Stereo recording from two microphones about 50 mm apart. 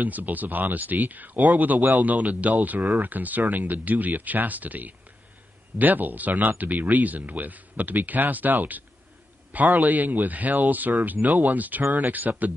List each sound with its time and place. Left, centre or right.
0.0 s speech: right